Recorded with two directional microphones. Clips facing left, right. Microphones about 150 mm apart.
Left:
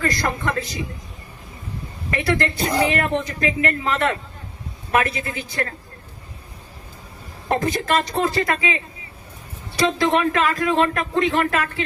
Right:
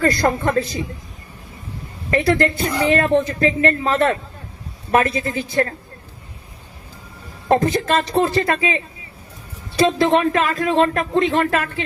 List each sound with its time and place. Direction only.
0.0 s a man's voice: 30° right (ahead or behind)
2.0 s a man's voice: 30° right (ahead or behind)
2.6 s speech: 35° left (ahead or behind)
2.9 s a man's voice: 35° right (ahead or behind)
7.4 s speech: 30° right (ahead or behind)